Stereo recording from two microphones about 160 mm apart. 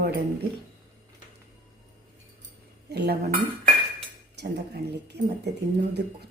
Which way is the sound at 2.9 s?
90° right.